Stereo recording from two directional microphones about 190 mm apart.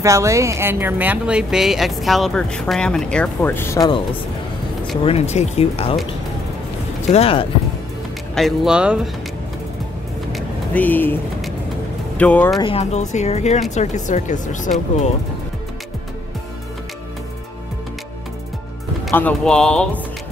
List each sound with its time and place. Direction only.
0.0 s speech: 15° right (ahead or behind); by 4.0 s 20° left (ahead or behind)
5.0 s speech: 30° left (ahead or behind)
7.1 s speech: 30° left (ahead or behind)
8.4 s speech: centre (ahead or behind)
10.3 s a sound: 10° left (ahead or behind)
12.2 s speech: 5° left (ahead or behind)
12.5 s speech: 30° left (ahead or behind)
19.0 s speech: 5° left (ahead or behind)